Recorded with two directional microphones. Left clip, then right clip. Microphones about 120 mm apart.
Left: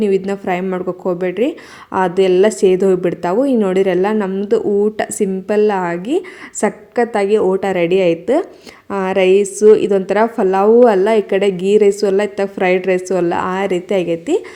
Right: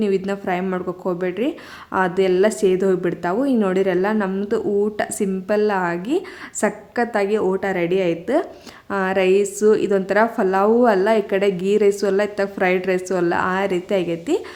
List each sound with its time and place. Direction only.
0.3 s a woman's voice: 25° left (ahead or behind)